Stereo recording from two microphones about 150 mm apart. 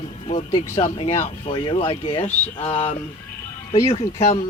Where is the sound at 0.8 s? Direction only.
45° left (ahead or behind).